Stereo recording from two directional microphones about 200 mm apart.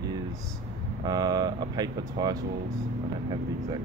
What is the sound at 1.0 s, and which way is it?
Speech, 20° right (ahead or behind).